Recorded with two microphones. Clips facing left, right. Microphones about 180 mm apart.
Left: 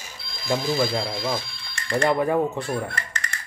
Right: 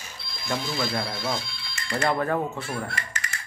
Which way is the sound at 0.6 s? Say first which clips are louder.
Left 5 dB; 30° left (ahead or behind).